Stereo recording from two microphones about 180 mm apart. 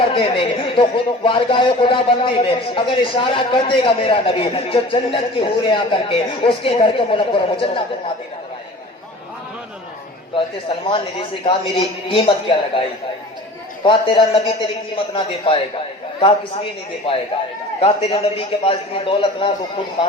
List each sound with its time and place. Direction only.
0.0 s speech: 30° left (ahead or behind)
10.3 s a man's voice: 30° left (ahead or behind)
13.8 s a man's voice: 30° left (ahead or behind)
17.0 s a man's voice: 30° left (ahead or behind)